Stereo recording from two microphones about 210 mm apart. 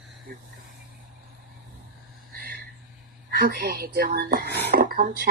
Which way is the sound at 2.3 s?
50° right (ahead or behind).